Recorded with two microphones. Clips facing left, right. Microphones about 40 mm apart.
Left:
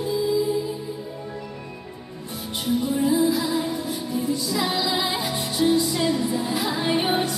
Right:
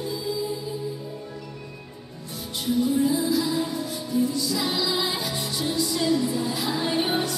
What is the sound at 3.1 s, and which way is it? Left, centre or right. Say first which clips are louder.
Music: left 3 dB; centre.